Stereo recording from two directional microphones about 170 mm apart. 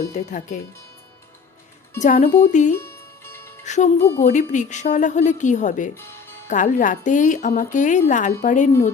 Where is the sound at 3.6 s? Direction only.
45° left (ahead or behind).